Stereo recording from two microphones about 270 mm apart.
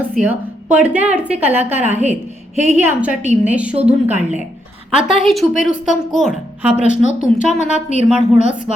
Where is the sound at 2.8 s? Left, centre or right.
Centre.